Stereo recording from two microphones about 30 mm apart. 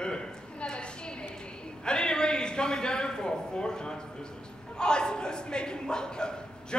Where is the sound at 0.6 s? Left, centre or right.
Left.